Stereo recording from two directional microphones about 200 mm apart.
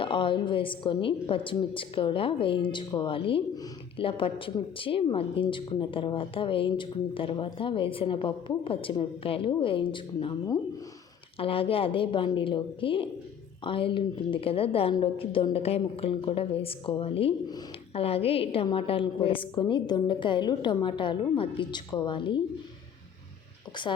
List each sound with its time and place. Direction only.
0.0 s a woman's voice: 25° left (ahead or behind)
11.3 s a woman's voice: 30° left (ahead or behind)
23.8 s a woman's voice: 25° left (ahead or behind)